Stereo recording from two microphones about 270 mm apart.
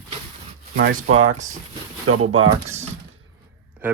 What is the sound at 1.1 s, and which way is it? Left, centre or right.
Speech, right.